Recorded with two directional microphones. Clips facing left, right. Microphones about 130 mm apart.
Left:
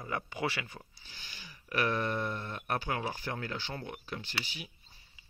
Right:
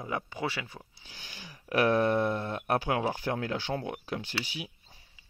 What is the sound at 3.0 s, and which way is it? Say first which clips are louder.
Speech: right 6 dB; 40° right (ahead or behind).